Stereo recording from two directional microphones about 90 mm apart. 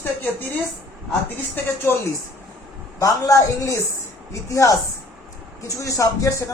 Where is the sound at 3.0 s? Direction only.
35° left (ahead or behind).